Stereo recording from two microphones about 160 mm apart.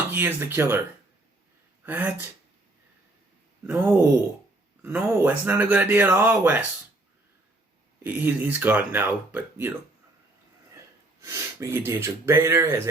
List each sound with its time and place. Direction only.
0.1 s speech: 10° right (ahead or behind)
1.8 s speech: 10° right (ahead or behind)
3.6 s speech: 10° right (ahead or behind)
8.0 s speech: 10° right (ahead or behind)
10.8 s speech: 20° right (ahead or behind)